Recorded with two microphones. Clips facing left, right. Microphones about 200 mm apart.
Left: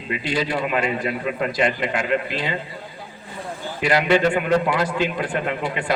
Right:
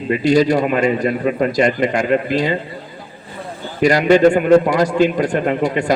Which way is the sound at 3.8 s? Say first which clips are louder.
Right 7 dB; 40° right (ahead or behind).